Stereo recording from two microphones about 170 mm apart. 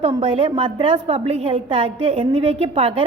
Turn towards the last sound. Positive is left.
turn(degrees=-35)  # may be behind; listen again after turning